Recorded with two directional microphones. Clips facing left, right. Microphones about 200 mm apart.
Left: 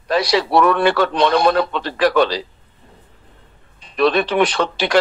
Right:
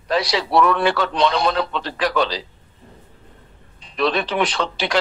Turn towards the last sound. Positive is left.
turn(degrees=60)  # may be behind; listen again after turning